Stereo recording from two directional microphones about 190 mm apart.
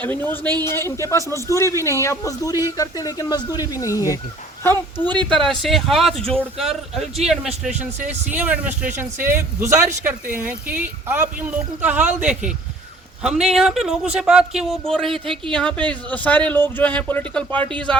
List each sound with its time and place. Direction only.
0.0 s speech: 10° left (ahead or behind)
5.5 s speech: centre (ahead or behind)